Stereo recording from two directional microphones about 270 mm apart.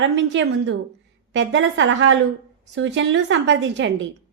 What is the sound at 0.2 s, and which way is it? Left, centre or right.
A woman's voice, right.